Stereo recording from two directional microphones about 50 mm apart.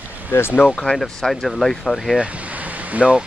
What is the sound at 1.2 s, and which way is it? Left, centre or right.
Speech, centre.